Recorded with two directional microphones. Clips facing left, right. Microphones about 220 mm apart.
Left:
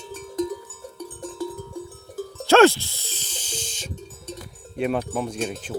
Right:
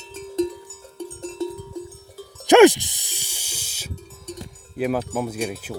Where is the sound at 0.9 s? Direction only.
25° right (ahead or behind).